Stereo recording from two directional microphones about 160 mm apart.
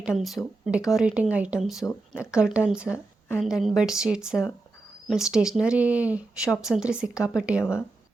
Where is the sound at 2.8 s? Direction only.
15° left (ahead or behind).